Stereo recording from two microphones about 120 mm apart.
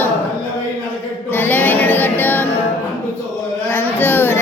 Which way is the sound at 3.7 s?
15° left (ahead or behind).